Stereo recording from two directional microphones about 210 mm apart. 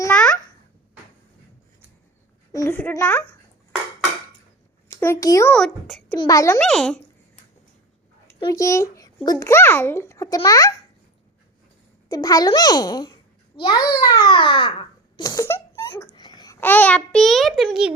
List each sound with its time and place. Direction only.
0.0 s babbling: 5° left (ahead or behind)
2.5 s a child's voice: 15° left (ahead or behind)
4.9 s a child's voice: 15° left (ahead or behind)
6.1 s a child's voice: 15° left (ahead or behind)
6.6 s a child's voice: 5° left (ahead or behind)
8.4 s a child's voice: 15° left (ahead or behind)
12.0 s a child's voice: 15° left (ahead or behind); by 17.9 s centre (ahead or behind)